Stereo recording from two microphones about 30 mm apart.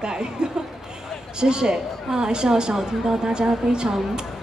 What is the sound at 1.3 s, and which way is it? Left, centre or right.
A woman's voice, right.